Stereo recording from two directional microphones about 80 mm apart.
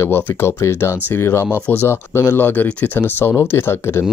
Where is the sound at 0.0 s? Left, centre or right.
Left.